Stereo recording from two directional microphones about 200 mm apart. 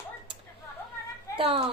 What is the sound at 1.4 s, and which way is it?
Speech, 25° right (ahead or behind).